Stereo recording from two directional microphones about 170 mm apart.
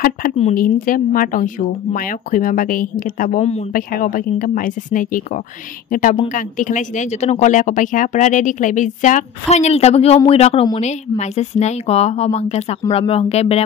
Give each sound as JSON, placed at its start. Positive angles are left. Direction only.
{"t": 0.6, "sound": "speech", "side_deg": 55}